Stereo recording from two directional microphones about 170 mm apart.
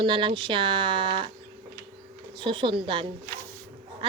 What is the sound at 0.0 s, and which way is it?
Speech, 30° right (ahead or behind).